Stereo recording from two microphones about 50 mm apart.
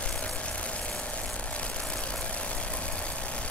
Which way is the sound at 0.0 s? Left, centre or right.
Left.